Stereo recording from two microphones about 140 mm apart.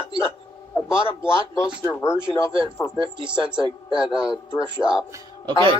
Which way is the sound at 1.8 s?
20° left (ahead or behind).